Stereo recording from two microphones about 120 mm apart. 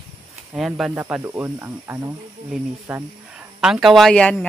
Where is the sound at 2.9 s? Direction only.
5° right (ahead or behind).